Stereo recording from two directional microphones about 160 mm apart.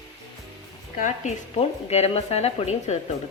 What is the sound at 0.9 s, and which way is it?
A woman's voice, 50° left (ahead or behind).